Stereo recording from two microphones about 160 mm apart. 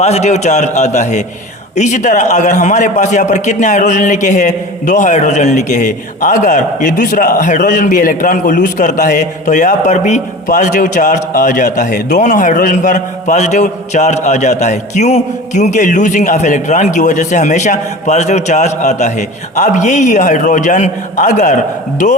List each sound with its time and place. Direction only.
0.0 s a man's voice: 45° left (ahead or behind)